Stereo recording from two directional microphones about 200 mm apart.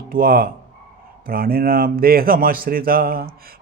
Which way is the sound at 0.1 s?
45° right (ahead or behind).